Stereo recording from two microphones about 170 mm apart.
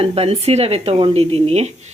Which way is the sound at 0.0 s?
35° right (ahead or behind).